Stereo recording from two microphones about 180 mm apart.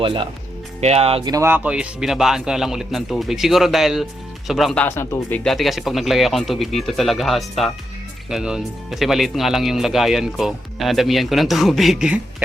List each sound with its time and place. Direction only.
0.0 s speech: 30° right (ahead or behind)
1.3 s speech: 15° right (ahead or behind)